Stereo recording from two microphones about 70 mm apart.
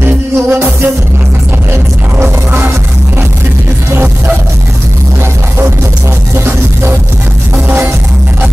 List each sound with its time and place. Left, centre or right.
0.5 s music: right
3.9 s music: right
6.3 s music: right